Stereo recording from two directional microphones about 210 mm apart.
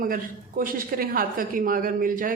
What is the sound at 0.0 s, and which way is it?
A woman's voice, 40° right (ahead or behind).